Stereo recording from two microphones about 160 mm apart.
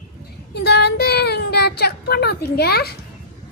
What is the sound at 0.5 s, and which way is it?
Speech, 90° left.